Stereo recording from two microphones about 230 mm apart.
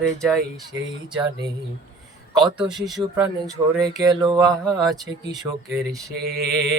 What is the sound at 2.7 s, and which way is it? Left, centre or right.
Speech, centre.